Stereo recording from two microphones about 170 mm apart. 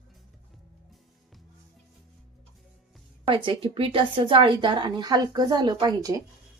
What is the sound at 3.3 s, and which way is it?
A woman's voice, 30° right (ahead or behind).